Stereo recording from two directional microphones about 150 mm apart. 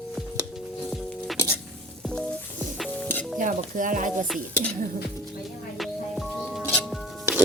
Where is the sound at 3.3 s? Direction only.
55° right (ahead or behind).